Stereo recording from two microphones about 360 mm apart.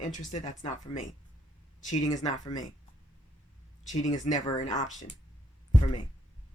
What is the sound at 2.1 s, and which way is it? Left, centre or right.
Speech, centre.